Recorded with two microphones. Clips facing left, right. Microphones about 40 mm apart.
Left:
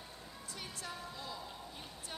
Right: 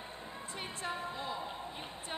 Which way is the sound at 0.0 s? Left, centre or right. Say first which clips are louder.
Right 6 dB; right.